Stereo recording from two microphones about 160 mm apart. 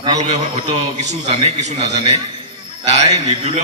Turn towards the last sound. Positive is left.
turn(degrees=-40)  # may be behind; listen again after turning